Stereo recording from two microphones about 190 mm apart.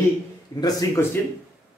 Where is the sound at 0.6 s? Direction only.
15° left (ahead or behind).